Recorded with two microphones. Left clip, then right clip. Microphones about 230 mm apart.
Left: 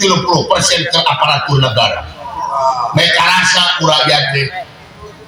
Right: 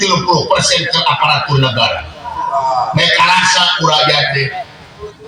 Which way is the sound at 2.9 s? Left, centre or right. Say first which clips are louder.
Right 1 dB; left.